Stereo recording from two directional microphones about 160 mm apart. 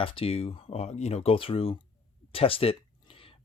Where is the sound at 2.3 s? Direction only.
35° left (ahead or behind).